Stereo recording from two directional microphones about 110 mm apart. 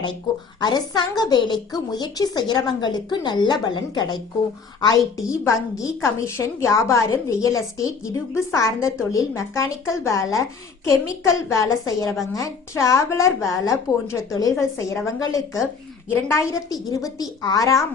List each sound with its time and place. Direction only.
0.6 s a woman's voice: 40° left (ahead or behind)